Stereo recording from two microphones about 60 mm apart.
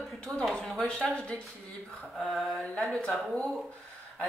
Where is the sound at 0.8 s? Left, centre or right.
Centre.